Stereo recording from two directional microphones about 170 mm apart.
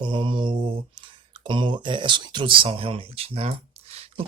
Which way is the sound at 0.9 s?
30° right (ahead or behind).